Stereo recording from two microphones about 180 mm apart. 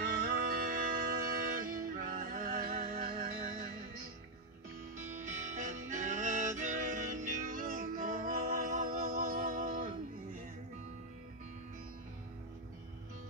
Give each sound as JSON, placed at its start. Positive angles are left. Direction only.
{"t": 0.0, "sound": "music", "side_deg": -55}
{"t": 4.9, "sound": "music", "side_deg": -40}